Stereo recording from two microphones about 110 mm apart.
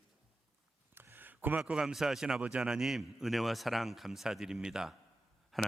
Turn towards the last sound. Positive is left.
turn(degrees=0)  # may be behind; listen again after turning